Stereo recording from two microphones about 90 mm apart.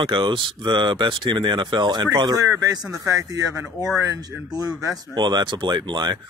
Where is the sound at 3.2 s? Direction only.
40° right (ahead or behind).